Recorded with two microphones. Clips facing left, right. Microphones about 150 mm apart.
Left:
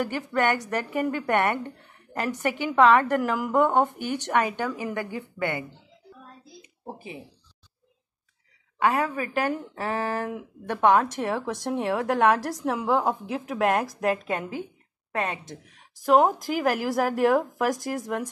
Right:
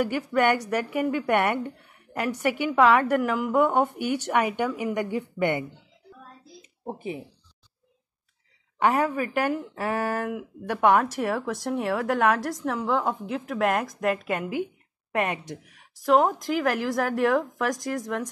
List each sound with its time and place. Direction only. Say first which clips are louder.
0.1 s speech: right 2 dB; 10° right (ahead or behind)
3.2 s a woman's voice: even; centre (ahead or behind); by 5.7 s 20° right (ahead or behind)
8.7 s a woman's voice: right 1 dB; 20° right (ahead or behind)
9.1 s speech: right 1 dB; 10° right (ahead or behind)
16.0 s speech: left 1 dB; centre (ahead or behind)